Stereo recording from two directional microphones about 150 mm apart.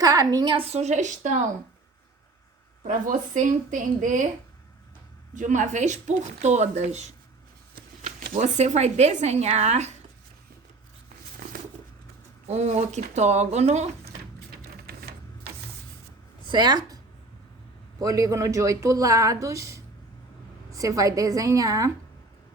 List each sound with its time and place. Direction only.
0.0 s a woman's voice: 25° right (ahead or behind); by 1.4 s 55° right (ahead or behind)
2.8 s a woman's voice: 60° right (ahead or behind)
5.3 s speech: 55° right (ahead or behind)
7.8 s speech: 65° right (ahead or behind); by 9.9 s 50° right (ahead or behind)
12.5 s speech: 50° right (ahead or behind)
16.5 s speech: 30° right (ahead or behind)
18.1 s a woman's voice: 25° right (ahead or behind)